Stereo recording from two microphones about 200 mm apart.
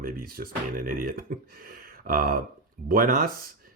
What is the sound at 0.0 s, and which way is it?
Speech, 50° right (ahead or behind).